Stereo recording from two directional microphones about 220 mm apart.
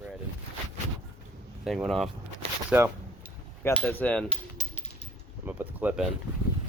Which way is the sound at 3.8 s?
5° left (ahead or behind).